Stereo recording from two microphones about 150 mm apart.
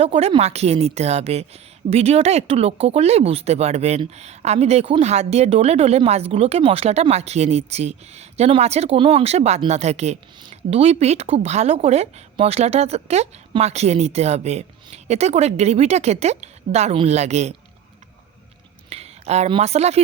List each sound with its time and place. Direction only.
0.0 s speech: 40° right (ahead or behind)
18.9 s a sound: 45° right (ahead or behind)
19.5 s speech: 45° right (ahead or behind)